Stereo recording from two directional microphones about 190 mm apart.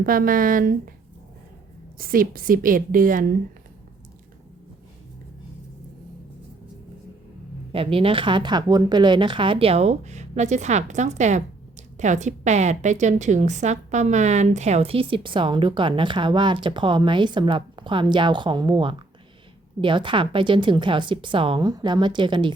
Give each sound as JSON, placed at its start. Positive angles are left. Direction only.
{"t": 0.0, "sound": "a woman's voice", "side_deg": -50}
{"t": 2.0, "sound": "a woman's voice", "side_deg": -50}
{"t": 7.7, "sound": "a woman's voice", "side_deg": -30}